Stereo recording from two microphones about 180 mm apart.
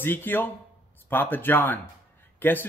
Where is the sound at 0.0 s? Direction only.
10° left (ahead or behind).